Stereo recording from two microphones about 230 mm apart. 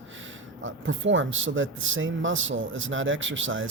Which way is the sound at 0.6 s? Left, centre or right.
Right.